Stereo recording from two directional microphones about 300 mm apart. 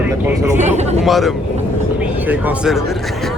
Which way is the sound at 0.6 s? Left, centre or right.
Right.